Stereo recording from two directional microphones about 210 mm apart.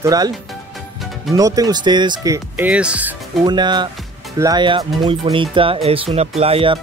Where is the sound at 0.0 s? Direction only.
15° right (ahead or behind).